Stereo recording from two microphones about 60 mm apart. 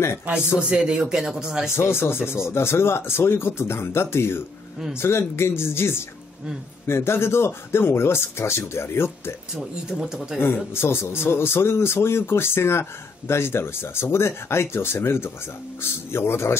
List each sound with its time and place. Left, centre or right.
0.6 s speech: centre
1.8 s speech: left
9.6 s speech: centre
10.4 s speech: left